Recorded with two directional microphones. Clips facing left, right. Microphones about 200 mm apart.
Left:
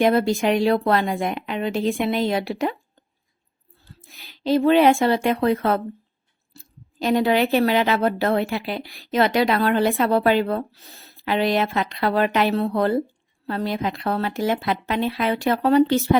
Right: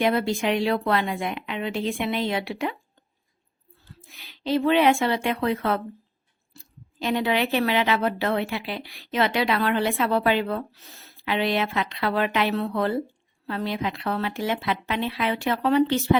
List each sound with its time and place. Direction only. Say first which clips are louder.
0.0 s a woman's voice: left 4 dB; 40° left (ahead or behind)
4.3 s a woman's voice: left 4 dB; 40° left (ahead or behind)
7.0 s a woman's voice: left 5 dB; 40° left (ahead or behind)